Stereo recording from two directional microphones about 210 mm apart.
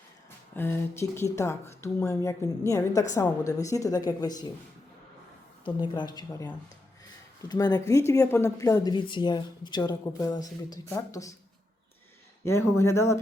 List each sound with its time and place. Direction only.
0.5 s speech: 10° left (ahead or behind)
5.6 s speech: 20° left (ahead or behind)
12.5 s speech: 15° left (ahead or behind)